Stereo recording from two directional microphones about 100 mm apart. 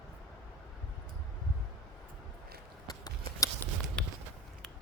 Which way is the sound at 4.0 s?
10° left (ahead or behind).